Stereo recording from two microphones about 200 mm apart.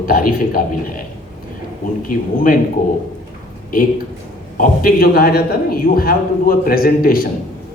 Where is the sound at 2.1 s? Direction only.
45° left (ahead or behind).